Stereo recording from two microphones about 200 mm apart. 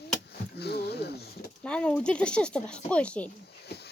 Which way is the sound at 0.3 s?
55° left (ahead or behind).